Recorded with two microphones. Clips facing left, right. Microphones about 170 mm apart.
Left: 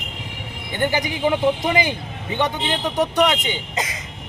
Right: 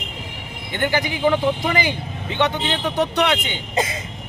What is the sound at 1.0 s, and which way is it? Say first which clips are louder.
Speech: right 3 dB; 20° left (ahead or behind).